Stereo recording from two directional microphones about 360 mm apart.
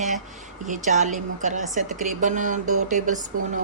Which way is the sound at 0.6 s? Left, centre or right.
Centre.